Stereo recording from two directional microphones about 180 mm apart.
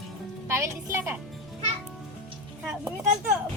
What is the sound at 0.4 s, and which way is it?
Speech, 15° right (ahead or behind).